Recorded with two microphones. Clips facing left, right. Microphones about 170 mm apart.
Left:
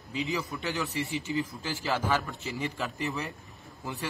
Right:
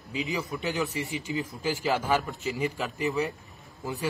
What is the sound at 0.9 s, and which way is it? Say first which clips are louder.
Speech: even; 40° left (ahead or behind).